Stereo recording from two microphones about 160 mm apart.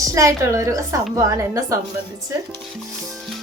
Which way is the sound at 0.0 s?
20° right (ahead or behind).